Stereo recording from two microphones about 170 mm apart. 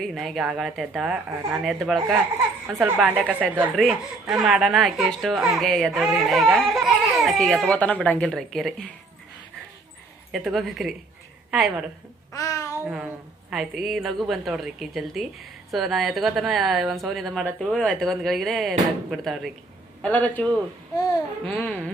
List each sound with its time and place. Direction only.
0.0 s a woman's voice: centre (ahead or behind)
3.0 s a woman's voice: 5° right (ahead or behind)
10.3 s a woman's voice: centre (ahead or behind)
12.3 s babbling: 20° left (ahead or behind)
12.7 s a woman's voice: 10° right (ahead or behind); by 21.8 s 10° left (ahead or behind)